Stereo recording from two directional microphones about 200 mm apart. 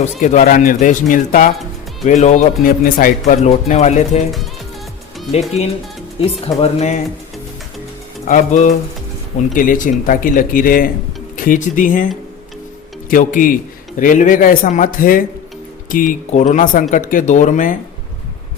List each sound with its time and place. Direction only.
0.0 s speech: 40° left (ahead or behind)
5.6 s speech: 35° left (ahead or behind)
8.2 s speech: 40° left (ahead or behind)